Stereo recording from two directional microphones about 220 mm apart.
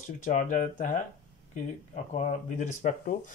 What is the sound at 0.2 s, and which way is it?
Speech, 35° left (ahead or behind).